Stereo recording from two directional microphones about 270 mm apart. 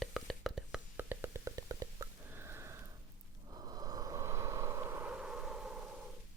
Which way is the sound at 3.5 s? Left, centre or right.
Centre.